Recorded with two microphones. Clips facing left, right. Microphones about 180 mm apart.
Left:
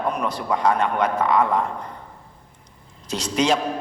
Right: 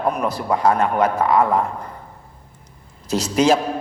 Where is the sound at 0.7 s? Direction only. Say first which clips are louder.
Right 3 dB; 40° right (ahead or behind).